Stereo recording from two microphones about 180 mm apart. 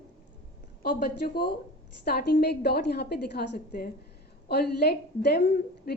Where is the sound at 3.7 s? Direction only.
50° left (ahead or behind).